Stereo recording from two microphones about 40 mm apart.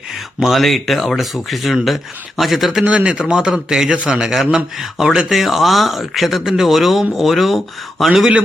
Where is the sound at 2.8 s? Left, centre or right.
Right.